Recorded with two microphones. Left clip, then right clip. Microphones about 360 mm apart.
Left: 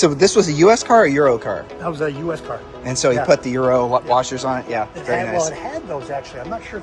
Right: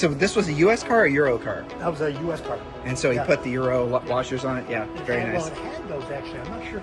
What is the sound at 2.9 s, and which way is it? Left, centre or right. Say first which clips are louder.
Speech: left 7 dB; centre.